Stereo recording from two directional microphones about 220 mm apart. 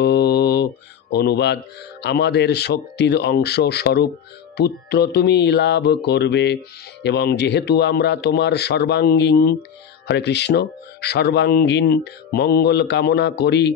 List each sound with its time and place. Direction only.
0.0 s mantra: 50° left (ahead or behind)
1.1 s speech: 50° left (ahead or behind)